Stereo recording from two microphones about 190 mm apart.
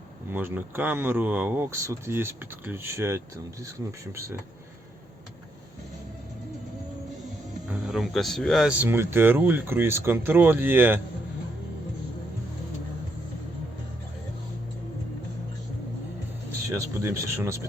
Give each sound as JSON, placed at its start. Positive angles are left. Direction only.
{"t": 0.3, "sound": "speech", "side_deg": -10}
{"t": 7.7, "sound": "speech", "side_deg": 0}
{"t": 16.6, "sound": "speech", "side_deg": -15}